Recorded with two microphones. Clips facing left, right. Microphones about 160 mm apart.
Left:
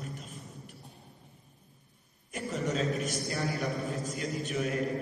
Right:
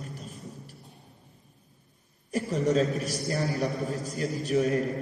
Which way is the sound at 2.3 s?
35° right (ahead or behind).